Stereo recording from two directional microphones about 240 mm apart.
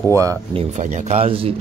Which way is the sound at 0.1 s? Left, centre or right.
Centre.